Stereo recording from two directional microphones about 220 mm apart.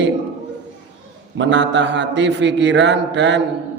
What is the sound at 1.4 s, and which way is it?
A man's voice, 55° right (ahead or behind).